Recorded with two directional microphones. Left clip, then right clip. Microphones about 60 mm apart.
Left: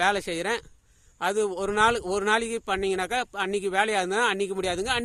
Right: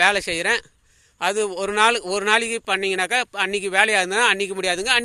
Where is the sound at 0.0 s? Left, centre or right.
Left.